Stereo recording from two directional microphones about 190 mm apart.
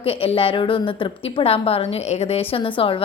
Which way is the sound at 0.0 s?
30° left (ahead or behind).